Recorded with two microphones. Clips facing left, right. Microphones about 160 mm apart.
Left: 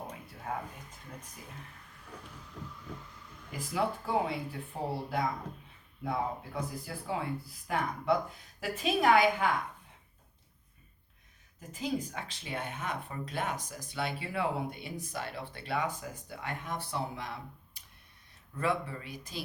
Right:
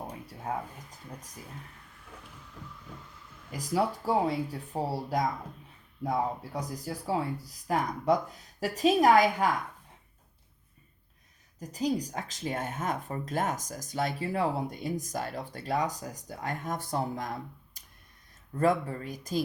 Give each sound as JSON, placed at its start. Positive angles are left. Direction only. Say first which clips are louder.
{"t": 0.4, "sound": "speech", "louder": "right 3 dB", "side_deg": -35}
{"t": 3.5, "sound": "speech", "louder": "right 4 dB", "side_deg": -35}
{"t": 11.6, "sound": "speech", "louder": "right 5 dB", "side_deg": -40}